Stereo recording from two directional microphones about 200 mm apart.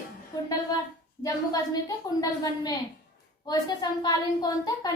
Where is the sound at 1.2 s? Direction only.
20° left (ahead or behind).